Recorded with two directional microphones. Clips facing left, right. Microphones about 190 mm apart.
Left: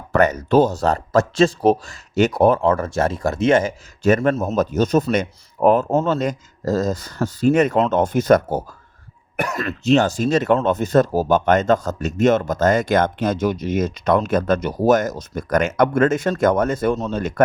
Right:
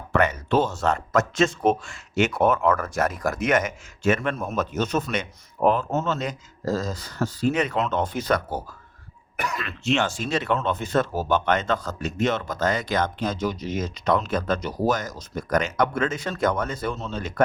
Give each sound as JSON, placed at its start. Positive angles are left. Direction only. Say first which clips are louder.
{"t": 0.1, "sound": "speech", "louder": "left 6 dB", "side_deg": 40}
{"t": 5.9, "sound": "speech", "louder": "left 7 dB", "side_deg": 30}
{"t": 6.1, "sound": "speech", "louder": "left 8 dB", "side_deg": 45}